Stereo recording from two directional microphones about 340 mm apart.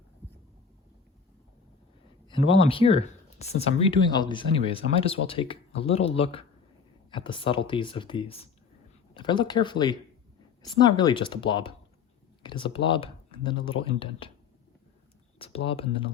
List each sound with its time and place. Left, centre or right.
2.5 s speech: centre
15.4 s speech: centre